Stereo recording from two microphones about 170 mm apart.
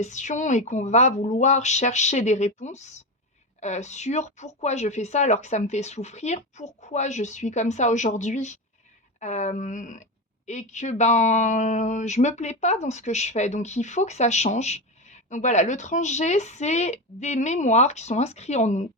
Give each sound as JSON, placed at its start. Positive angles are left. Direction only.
{"t": 0.0, "sound": "speech", "side_deg": 45}